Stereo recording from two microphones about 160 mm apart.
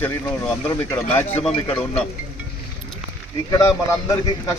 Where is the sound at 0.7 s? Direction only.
20° left (ahead or behind).